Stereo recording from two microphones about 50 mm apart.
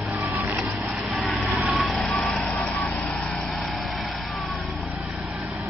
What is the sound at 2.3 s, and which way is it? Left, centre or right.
Vehicle, left.